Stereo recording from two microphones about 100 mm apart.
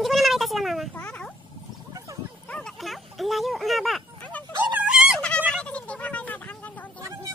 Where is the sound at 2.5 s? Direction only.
5° left (ahead or behind).